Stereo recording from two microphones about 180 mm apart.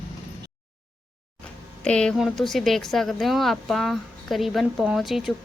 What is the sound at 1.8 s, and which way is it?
Speech, 5° left (ahead or behind).